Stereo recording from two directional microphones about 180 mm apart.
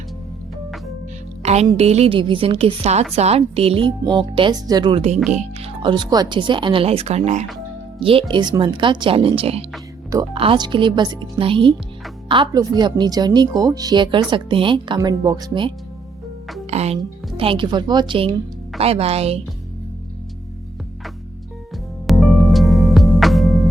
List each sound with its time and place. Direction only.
1.4 s music: 35° right (ahead or behind)
1.7 s a woman's voice: 35° right (ahead or behind)
7.9 s speech: 30° right (ahead or behind)
16.6 s a woman's voice: 35° right (ahead or behind)
22.0 s music: centre (ahead or behind)